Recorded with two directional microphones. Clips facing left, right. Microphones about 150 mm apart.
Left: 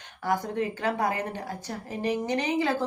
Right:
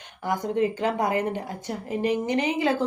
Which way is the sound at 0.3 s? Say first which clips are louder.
Right 3 dB; 20° right (ahead or behind).